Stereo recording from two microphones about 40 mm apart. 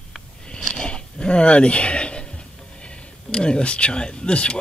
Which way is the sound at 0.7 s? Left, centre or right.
Left.